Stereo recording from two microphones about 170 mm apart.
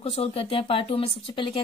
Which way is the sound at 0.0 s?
35° left (ahead or behind).